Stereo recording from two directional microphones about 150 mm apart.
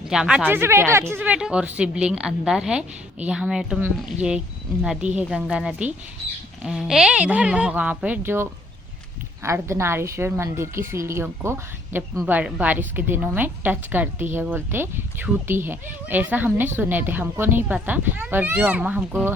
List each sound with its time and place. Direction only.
0.1 s speech: 5° right (ahead or behind)